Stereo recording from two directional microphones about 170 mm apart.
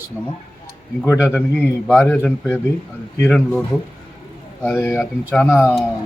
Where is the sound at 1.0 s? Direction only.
10° left (ahead or behind).